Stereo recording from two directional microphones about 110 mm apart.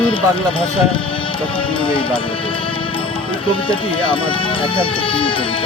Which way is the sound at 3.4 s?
55° left (ahead or behind).